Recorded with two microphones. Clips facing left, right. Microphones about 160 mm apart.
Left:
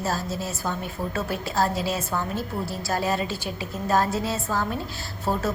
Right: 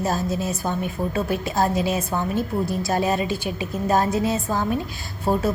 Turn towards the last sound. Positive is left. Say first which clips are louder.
# right 4 dB
turn(degrees=-15)  # may be behind; listen again after turning